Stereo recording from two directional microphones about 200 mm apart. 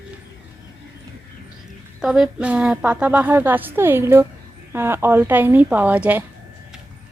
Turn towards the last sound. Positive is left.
turn(degrees=-5)  # may be behind; listen again after turning